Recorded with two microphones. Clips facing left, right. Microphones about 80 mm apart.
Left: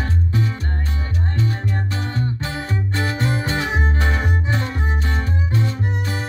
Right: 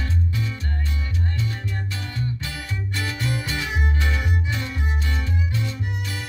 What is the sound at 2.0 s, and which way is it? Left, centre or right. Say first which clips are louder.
Music: left 5 dB; left.